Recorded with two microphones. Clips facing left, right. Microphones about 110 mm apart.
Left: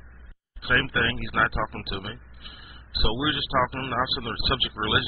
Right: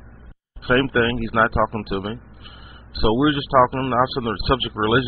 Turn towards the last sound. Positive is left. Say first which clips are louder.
# right 8 dB
turn(degrees=-40)  # may be behind; listen again after turning